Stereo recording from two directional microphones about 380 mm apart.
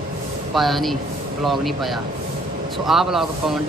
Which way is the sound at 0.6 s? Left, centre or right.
Centre.